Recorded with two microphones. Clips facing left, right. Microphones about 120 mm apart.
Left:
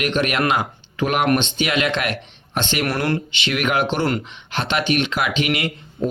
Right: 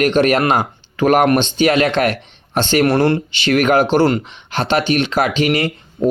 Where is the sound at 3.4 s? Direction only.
40° right (ahead or behind).